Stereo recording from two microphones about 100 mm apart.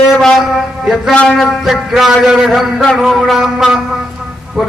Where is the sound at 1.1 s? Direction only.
Centre (ahead or behind).